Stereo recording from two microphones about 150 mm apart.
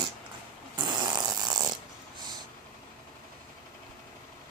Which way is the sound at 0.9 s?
25° right (ahead or behind).